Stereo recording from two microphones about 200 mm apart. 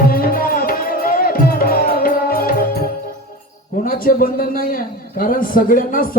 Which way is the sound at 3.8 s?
45° left (ahead or behind).